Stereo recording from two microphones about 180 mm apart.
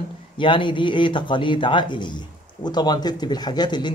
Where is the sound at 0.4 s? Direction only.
25° left (ahead or behind).